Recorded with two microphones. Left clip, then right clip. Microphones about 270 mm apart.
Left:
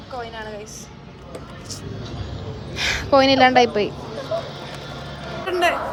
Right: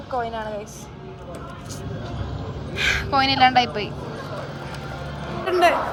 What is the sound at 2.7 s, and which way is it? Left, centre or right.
Speech, centre.